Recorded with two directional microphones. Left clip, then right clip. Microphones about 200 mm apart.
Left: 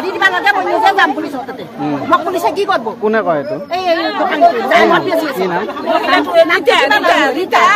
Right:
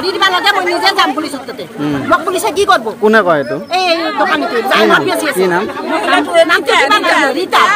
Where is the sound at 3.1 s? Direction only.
55° right (ahead or behind).